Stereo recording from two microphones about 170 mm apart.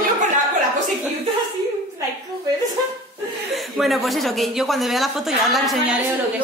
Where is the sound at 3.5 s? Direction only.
Centre (ahead or behind).